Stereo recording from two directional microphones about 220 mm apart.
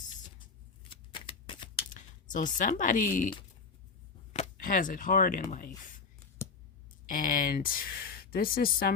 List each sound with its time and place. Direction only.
0.9 s shuffling cards: 25° left (ahead or behind)
1.9 s speech: 35° left (ahead or behind)
7.1 s speech: 40° left (ahead or behind)